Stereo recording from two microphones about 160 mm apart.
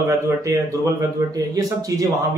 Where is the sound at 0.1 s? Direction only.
20° right (ahead or behind).